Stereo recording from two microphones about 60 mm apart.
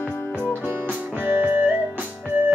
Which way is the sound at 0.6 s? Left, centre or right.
Right.